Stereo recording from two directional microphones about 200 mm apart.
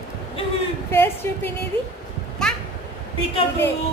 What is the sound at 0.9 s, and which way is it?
Speech, 10° left (ahead or behind).